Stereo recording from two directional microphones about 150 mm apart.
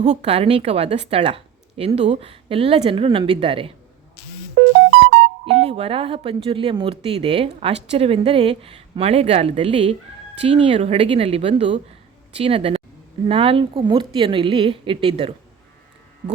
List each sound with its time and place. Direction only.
0.0 s speech: 45° right (ahead or behind)
5.5 s speech: 40° right (ahead or behind)